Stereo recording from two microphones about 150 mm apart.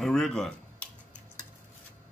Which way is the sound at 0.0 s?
5° left (ahead or behind).